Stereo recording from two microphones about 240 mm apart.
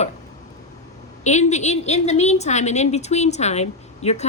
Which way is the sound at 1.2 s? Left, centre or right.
Left.